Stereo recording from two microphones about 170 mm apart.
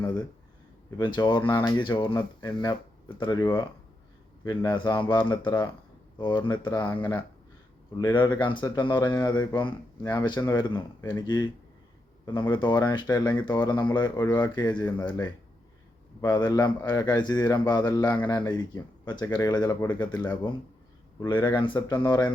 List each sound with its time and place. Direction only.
0.0 s speech: 25° left (ahead or behind)
2.1 s speech: 20° left (ahead or behind)
6.9 s speech: 10° left (ahead or behind)
7.9 s speech: 25° left (ahead or behind)
16.2 s speech: 25° left (ahead or behind)
21.2 s speech: 30° left (ahead or behind)